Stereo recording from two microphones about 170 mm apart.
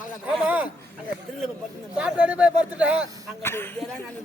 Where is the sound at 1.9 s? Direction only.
5° right (ahead or behind).